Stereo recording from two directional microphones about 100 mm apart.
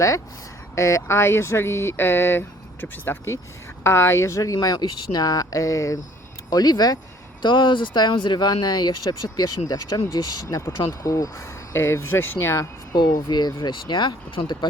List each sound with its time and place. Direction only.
0.8 s speech: 30° left (ahead or behind)
7.4 s speech: 50° left (ahead or behind); by 12.6 s 25° left (ahead or behind)
12.9 s speech: 40° left (ahead or behind)